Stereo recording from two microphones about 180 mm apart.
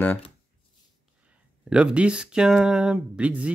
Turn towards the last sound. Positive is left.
turn(degrees=-5)  # may be behind; listen again after turning